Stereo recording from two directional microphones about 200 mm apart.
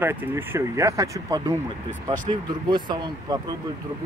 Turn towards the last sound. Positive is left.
turn(degrees=-20)  # may be behind; listen again after turning